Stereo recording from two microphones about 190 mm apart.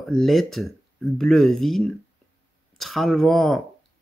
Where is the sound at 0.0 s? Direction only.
Centre (ahead or behind).